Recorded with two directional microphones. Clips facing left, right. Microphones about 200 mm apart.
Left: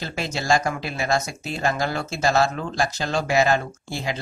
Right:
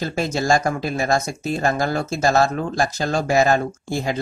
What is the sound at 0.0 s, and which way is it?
Speech, 45° right (ahead or behind).